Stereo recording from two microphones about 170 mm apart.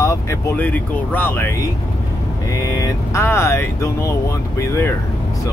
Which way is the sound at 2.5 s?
20° left (ahead or behind).